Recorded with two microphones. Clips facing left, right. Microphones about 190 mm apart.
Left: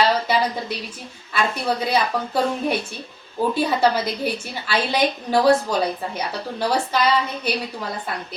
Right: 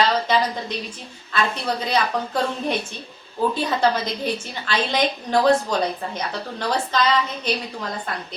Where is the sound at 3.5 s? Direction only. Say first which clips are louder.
Left 4 dB; 10° left (ahead or behind).